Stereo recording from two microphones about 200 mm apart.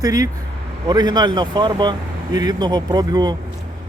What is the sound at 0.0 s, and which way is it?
Speech, 20° right (ahead or behind).